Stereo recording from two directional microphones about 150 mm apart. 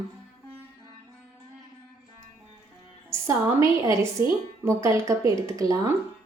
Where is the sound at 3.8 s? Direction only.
20° right (ahead or behind).